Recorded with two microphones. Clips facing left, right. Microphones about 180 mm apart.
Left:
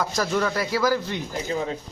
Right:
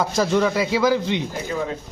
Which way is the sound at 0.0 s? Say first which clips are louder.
Right 5 dB; 25° right (ahead or behind).